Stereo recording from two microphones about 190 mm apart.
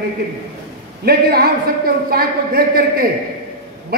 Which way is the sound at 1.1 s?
55° right (ahead or behind).